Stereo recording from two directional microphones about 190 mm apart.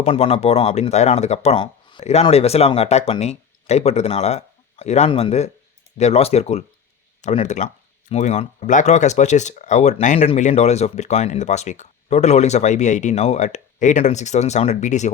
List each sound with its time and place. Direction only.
0.0 s speech: 30° left (ahead or behind)